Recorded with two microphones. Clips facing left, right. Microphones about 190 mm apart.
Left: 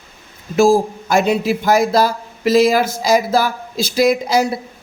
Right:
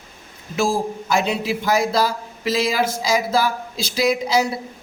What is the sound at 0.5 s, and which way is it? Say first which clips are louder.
A man's voice: left 8 dB; 45° left (ahead or behind).